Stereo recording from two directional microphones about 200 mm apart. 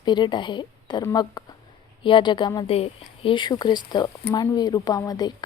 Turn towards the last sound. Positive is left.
turn(degrees=20)  # may be behind; listen again after turning